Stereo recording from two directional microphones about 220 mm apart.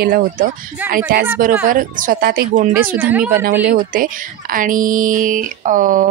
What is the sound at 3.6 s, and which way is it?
Speech, 40° right (ahead or behind).